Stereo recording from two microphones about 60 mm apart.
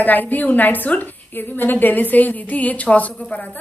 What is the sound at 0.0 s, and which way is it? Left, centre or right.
A woman's voice, left.